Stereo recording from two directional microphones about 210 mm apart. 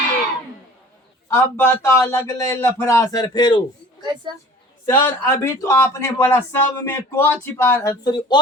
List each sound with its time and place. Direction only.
1.3 s speech: 10° left (ahead or behind)
4.0 s a woman's voice: 20° right (ahead or behind)
4.9 s speech: 10° left (ahead or behind)